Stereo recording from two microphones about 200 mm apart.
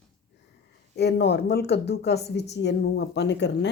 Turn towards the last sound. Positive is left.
turn(degrees=60)  # may be behind; listen again after turning